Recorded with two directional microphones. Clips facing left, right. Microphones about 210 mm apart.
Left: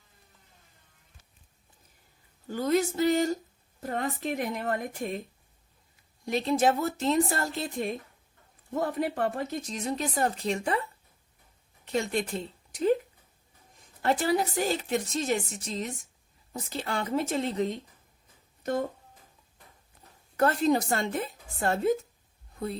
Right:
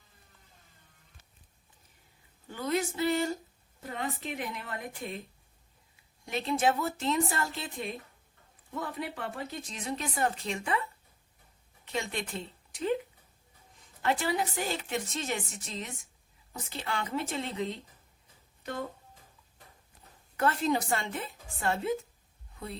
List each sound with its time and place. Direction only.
2.5 s a woman's voice: 40° left (ahead or behind)
6.2 s speech: 40° left (ahead or behind)
11.9 s speech: 40° left (ahead or behind)
14.0 s speech: 40° left (ahead or behind)
20.3 s speech: 40° left (ahead or behind)